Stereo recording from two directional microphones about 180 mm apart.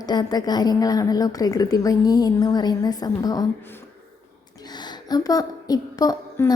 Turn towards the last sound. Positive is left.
turn(degrees=20)  # may be behind; listen again after turning